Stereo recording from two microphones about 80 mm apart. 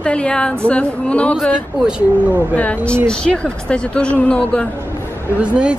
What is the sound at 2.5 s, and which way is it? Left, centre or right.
A woman's voice, centre.